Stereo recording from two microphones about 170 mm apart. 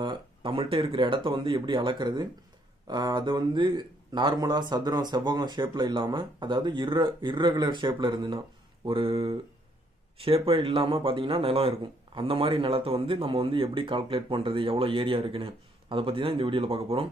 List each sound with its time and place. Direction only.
0.0 s speech: 30° right (ahead or behind)